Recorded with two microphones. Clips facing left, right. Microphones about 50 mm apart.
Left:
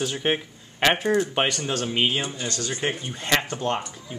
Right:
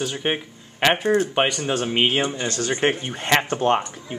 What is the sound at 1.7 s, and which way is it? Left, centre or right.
Speech, right.